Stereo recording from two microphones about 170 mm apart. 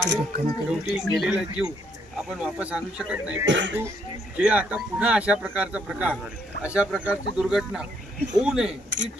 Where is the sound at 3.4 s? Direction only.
90° right.